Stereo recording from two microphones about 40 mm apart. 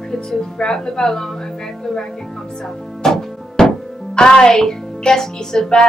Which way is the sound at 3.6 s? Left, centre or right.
Centre.